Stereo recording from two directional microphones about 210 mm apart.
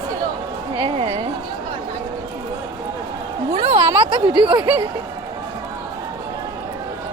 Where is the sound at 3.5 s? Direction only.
25° right (ahead or behind).